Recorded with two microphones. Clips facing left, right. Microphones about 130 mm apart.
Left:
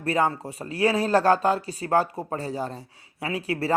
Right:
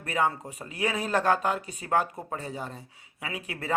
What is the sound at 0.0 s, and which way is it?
Speech, 35° left (ahead or behind).